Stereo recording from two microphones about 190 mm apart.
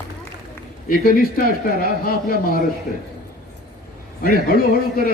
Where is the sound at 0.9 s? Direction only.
50° left (ahead or behind).